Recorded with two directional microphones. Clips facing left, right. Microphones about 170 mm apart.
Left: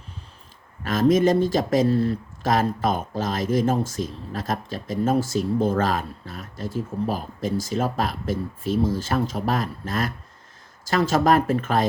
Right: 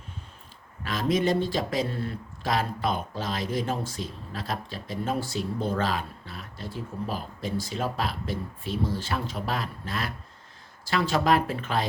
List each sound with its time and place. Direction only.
0.9 s speech: 45° left (ahead or behind)